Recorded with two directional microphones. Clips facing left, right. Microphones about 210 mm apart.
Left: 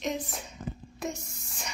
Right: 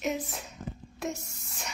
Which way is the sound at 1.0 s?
Centre (ahead or behind).